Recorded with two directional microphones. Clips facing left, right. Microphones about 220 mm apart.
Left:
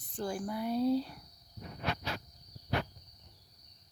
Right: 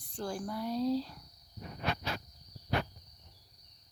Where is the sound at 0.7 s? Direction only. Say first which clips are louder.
Left 2 dB; 55° left (ahead or behind).